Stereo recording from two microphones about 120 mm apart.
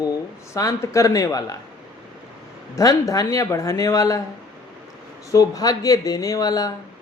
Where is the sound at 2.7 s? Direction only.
30° left (ahead or behind).